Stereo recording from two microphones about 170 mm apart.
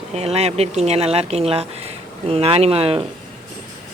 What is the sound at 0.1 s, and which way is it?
Speech, 40° right (ahead or behind).